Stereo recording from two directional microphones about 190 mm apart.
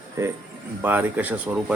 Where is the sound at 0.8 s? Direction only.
10° right (ahead or behind).